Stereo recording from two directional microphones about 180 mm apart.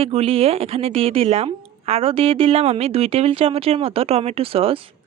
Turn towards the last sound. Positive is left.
turn(degrees=-30)  # may be behind; listen again after turning